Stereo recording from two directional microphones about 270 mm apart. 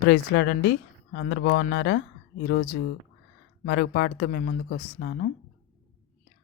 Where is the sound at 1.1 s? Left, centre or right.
Left.